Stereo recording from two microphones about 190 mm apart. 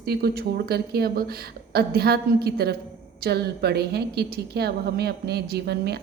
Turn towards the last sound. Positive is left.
turn(degrees=-60)  # may be behind; listen again after turning